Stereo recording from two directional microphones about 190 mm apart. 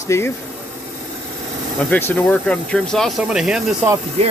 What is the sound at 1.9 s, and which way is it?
Speech, 10° left (ahead or behind).